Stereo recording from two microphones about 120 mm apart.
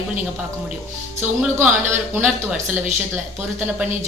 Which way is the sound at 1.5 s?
20° right (ahead or behind).